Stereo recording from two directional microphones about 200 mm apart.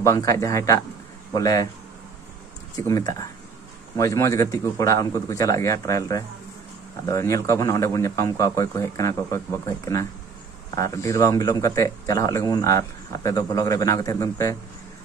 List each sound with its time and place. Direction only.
0.0 s speech: 15° left (ahead or behind)
2.7 s speech: 20° left (ahead or behind)